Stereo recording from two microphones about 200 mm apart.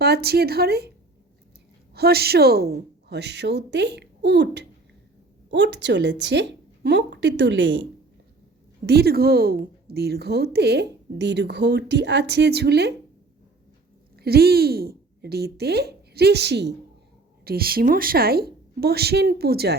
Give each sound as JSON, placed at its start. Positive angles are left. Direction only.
{"t": 0.0, "sound": "a woman's voice", "side_deg": -50}
{"t": 1.9, "sound": "a woman's voice", "side_deg": -50}
{"t": 8.9, "sound": "a woman's voice", "side_deg": -50}
{"t": 14.2, "sound": "a woman's voice", "side_deg": -50}